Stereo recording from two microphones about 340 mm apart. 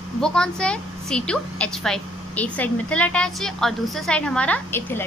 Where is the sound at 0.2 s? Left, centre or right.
Centre.